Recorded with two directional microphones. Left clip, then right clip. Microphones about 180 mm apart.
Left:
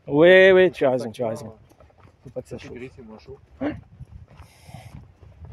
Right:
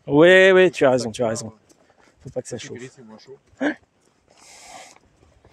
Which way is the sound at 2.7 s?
65° right (ahead or behind).